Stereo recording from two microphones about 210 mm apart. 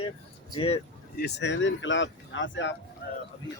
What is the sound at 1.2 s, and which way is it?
Speech, 55° left (ahead or behind).